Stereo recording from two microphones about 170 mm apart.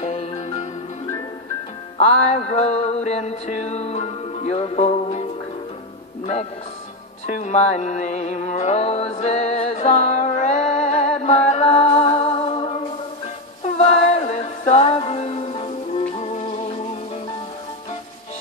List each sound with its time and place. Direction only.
0.0 s music: 40° left (ahead or behind)
2.0 s music: 40° left (ahead or behind)
7.3 s music: 45° left (ahead or behind)
13.7 s music: 40° left (ahead or behind)